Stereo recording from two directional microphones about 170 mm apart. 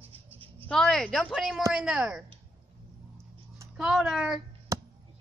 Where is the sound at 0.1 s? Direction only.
35° right (ahead or behind).